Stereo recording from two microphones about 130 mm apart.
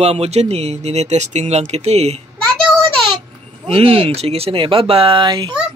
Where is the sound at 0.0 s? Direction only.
55° right (ahead or behind).